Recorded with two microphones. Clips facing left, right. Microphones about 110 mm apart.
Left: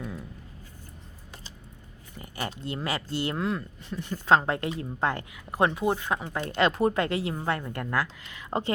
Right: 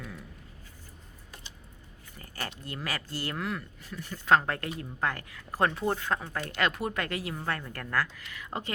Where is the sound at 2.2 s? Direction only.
15° left (ahead or behind).